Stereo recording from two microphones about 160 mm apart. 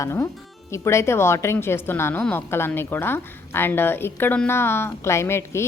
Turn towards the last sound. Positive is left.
turn(degrees=15)  # may be behind; listen again after turning